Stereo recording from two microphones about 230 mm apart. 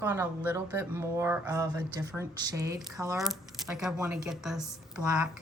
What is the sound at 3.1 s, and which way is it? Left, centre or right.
A woman's voice, centre.